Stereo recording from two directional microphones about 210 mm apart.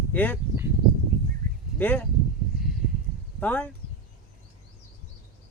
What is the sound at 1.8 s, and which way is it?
Speech, 10° left (ahead or behind).